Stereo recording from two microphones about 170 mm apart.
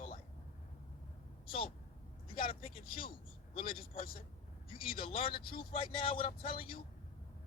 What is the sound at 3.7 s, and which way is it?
Speech, 55° left (ahead or behind).